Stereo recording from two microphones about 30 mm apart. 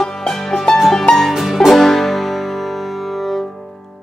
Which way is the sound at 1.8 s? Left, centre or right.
Centre.